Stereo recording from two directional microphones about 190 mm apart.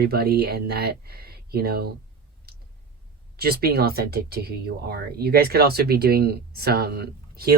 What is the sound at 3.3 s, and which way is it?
Speech, 55° right (ahead or behind).